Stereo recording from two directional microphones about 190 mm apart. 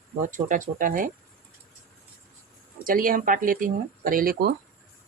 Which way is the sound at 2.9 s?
45° right (ahead or behind).